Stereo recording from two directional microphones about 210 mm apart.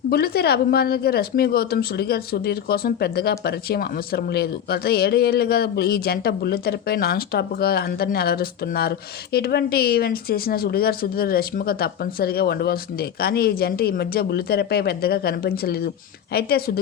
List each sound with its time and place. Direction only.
0.1 s a woman's voice: 45° left (ahead or behind)